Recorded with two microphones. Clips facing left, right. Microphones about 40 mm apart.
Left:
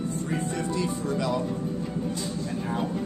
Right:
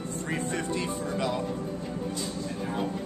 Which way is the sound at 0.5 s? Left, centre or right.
Right.